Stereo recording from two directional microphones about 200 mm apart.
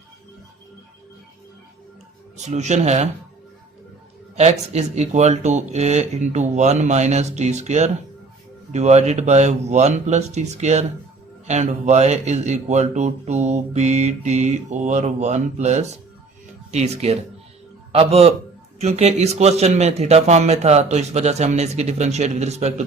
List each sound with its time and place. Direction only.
2.4 s speech: 35° right (ahead or behind)
4.4 s a man's voice: 35° right (ahead or behind)